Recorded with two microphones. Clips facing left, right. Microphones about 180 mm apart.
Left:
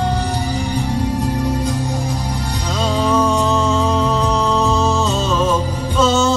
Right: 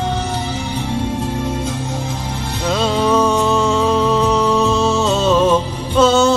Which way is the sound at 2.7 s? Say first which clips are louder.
Right 1 dB; 70° right (ahead or behind).